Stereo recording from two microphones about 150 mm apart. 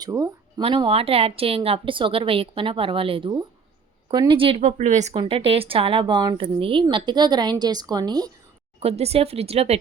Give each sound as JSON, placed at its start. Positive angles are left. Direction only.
{"t": 0.0, "sound": "speech", "side_deg": -25}
{"t": 0.6, "sound": "a woman's voice", "side_deg": -35}
{"t": 5.1, "sound": "a woman's voice", "side_deg": -40}
{"t": 8.8, "sound": "speech", "side_deg": -45}